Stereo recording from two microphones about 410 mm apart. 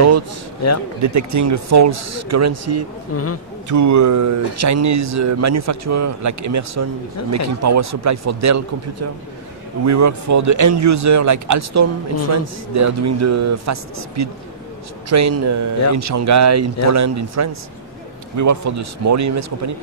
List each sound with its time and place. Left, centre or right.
0.6 s speech: left
1.0 s speech: right
9.8 s a man's voice: right